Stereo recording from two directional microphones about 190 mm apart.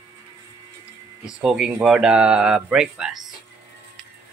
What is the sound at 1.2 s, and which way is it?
Speech, 5° right (ahead or behind).